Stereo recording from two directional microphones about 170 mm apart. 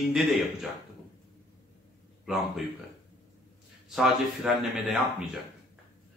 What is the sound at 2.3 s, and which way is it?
Speech, centre (ahead or behind).